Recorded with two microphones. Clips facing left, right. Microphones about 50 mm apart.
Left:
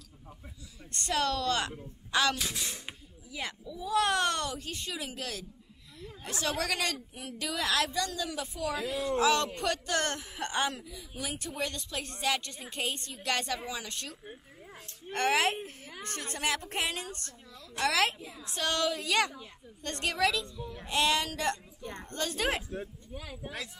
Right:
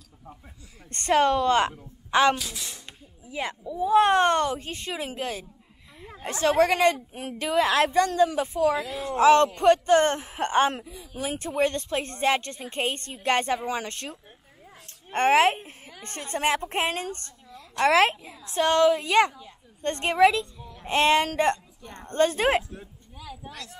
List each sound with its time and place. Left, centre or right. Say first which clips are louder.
0.9 s speech: right 9 dB; right
2.0 s a sound: right 8 dB; right
2.3 s speech: right 1 dB; centre
3.3 s speech: right 7 dB; right
8.7 s speech: right 3 dB; centre
9.2 s speech: right 12 dB; right
15.1 s a woman's voice: right 8 dB; right
23.1 s speech: even; centre